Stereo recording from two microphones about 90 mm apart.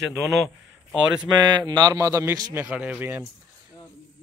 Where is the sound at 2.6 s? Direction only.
15° right (ahead or behind).